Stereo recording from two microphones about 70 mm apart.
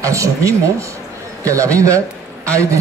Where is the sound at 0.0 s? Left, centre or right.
Right.